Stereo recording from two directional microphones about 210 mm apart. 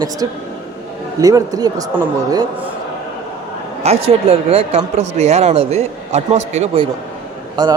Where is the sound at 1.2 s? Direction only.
15° right (ahead or behind).